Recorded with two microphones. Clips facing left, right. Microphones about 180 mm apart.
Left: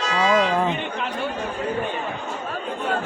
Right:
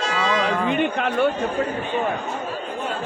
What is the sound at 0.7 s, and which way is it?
Chatter, 60° right (ahead or behind).